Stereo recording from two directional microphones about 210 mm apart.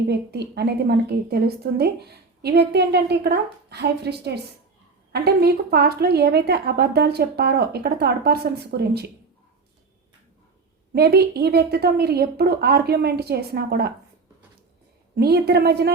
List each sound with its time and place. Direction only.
0.1 s a woman's voice: 50° right (ahead or behind)
10.9 s a woman's voice: 50° right (ahead or behind)
15.1 s a woman's voice: 50° right (ahead or behind)